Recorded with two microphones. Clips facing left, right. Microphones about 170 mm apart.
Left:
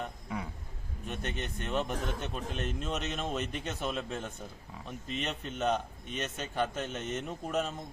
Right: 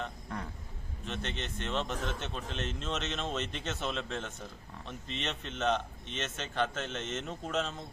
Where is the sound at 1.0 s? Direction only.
15° left (ahead or behind).